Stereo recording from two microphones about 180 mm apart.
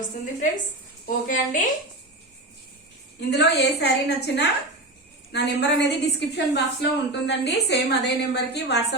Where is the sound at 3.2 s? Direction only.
65° left (ahead or behind).